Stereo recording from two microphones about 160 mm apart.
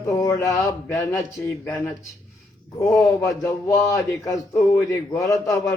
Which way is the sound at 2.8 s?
20° left (ahead or behind).